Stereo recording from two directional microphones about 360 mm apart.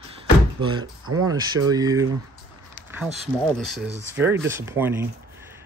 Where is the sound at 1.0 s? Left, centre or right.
Right.